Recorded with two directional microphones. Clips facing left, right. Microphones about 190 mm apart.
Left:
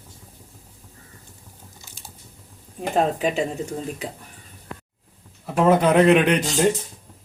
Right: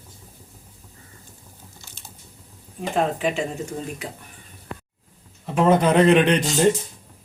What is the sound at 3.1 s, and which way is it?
Speech, 35° left (ahead or behind).